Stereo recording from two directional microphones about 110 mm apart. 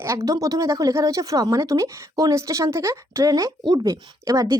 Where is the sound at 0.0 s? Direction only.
25° right (ahead or behind).